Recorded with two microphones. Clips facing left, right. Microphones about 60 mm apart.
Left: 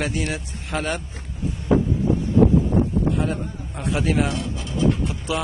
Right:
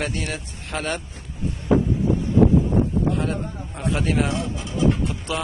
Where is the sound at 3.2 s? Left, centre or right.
Centre.